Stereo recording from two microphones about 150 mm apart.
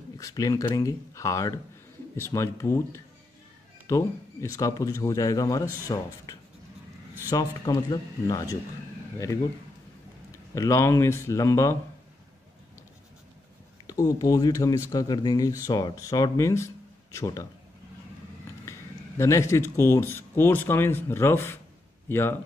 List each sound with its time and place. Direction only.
0.2 s speech: 20° left (ahead or behind)
10.5 s speech: 20° left (ahead or behind)
13.8 s speech: 25° left (ahead or behind)
18.7 s a sound: 20° left (ahead or behind)
19.8 s speech: 15° left (ahead or behind)